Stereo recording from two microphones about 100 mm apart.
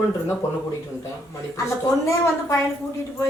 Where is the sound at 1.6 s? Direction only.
30° left (ahead or behind).